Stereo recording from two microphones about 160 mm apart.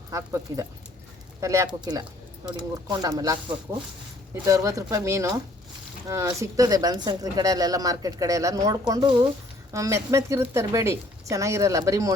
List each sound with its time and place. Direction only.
0.1 s speech: 20° right (ahead or behind)
4.4 s speech: 20° right (ahead or behind)